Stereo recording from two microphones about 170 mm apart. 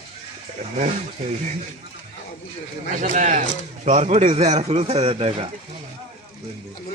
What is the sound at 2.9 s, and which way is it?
Speech, 50° right (ahead or behind).